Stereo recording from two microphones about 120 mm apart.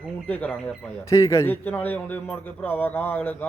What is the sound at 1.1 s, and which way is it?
Speech, 25° left (ahead or behind).